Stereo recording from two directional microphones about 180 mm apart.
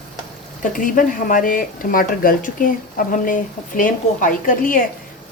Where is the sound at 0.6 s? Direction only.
50° left (ahead or behind).